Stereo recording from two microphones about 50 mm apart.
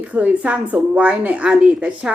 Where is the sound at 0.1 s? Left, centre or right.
Right.